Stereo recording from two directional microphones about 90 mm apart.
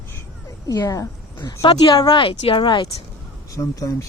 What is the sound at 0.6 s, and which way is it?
Speech, 45° left (ahead or behind).